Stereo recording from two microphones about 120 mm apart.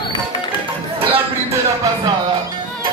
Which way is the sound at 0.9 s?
50° right (ahead or behind).